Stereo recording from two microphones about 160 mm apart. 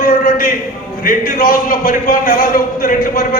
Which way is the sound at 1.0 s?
65° left (ahead or behind).